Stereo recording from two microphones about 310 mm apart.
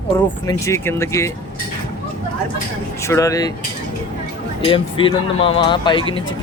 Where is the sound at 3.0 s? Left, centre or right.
Centre.